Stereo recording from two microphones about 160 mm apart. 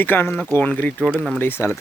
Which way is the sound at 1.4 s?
15° left (ahead or behind).